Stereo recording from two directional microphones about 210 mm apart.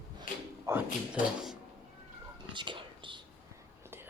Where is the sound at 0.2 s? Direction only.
10° right (ahead or behind).